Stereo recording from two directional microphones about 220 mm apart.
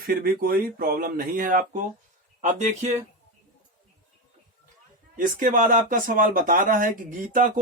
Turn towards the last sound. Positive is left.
turn(degrees=-40)  # may be behind; listen again after turning